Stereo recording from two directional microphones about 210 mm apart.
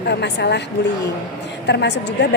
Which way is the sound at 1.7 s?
55° left (ahead or behind).